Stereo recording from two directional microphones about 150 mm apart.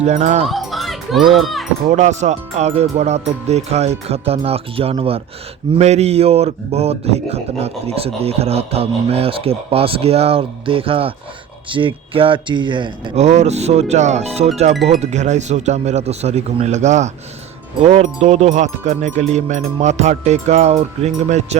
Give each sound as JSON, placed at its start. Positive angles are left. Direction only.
{"t": 0.0, "sound": "speech", "side_deg": -50}
{"t": 0.4, "sound": "children playing", "side_deg": 0}
{"t": 1.3, "sound": "speech", "side_deg": 0}
{"t": 1.9, "sound": "speech", "side_deg": -50}
{"t": 13.1, "sound": "speech", "side_deg": -50}